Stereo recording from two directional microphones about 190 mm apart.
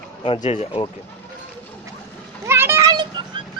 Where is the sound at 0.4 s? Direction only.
35° left (ahead or behind).